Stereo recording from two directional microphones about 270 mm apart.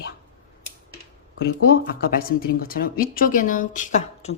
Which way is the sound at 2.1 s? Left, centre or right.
Left.